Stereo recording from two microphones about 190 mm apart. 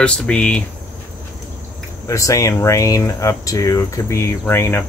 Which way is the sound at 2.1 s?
15° left (ahead or behind).